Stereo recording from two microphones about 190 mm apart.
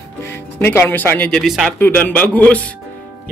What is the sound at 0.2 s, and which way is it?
Speech, 10° left (ahead or behind).